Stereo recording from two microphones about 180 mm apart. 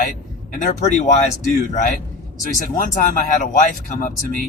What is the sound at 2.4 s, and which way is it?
Speech, 50° left (ahead or behind).